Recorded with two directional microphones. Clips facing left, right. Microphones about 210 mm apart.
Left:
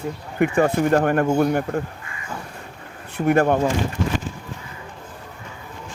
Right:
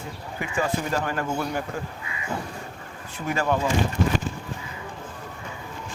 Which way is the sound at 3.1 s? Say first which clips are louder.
Left 8 dB; 60° left (ahead or behind).